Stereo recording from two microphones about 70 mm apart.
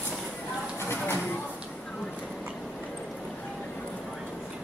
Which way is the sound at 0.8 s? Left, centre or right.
Left.